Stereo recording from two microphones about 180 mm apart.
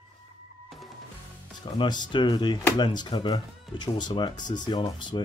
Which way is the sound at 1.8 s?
25° left (ahead or behind).